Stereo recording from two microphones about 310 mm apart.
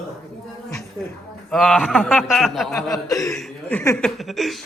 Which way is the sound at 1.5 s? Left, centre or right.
Centre.